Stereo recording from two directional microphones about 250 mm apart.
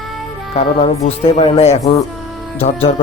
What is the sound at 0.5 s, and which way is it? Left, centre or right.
Speech, left.